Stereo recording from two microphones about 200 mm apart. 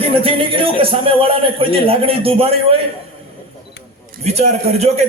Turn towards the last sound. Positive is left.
turn(degrees=-30)  # may be behind; listen again after turning